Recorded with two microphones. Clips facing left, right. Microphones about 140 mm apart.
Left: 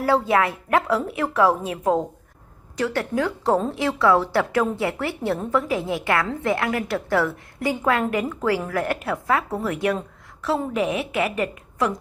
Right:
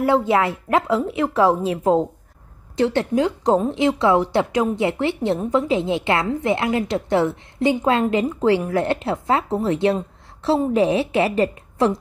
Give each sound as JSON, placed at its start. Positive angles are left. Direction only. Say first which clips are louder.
{"t": 0.0, "sound": "a woman's voice", "louder": "right 2 dB", "side_deg": -25}